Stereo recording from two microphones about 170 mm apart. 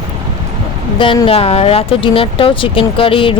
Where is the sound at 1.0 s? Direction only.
30° left (ahead or behind).